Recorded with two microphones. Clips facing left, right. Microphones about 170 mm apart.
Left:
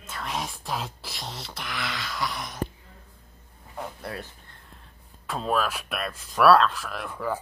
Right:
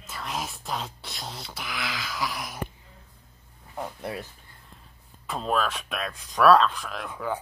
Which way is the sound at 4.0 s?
10° right (ahead or behind).